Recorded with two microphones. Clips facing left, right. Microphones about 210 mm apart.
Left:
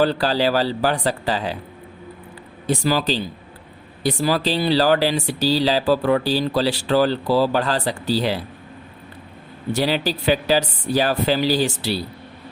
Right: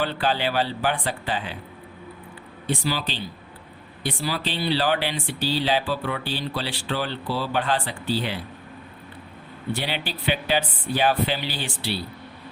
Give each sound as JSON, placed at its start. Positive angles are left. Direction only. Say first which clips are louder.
{"t": 0.0, "sound": "speech", "louder": "left 6 dB", "side_deg": 40}
{"t": 2.6, "sound": "speech", "louder": "left 7 dB", "side_deg": 40}
{"t": 9.7, "sound": "speech", "louder": "left 10 dB", "side_deg": 40}